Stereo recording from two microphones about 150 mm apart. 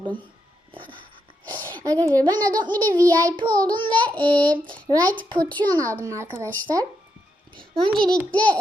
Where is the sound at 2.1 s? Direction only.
30° right (ahead or behind).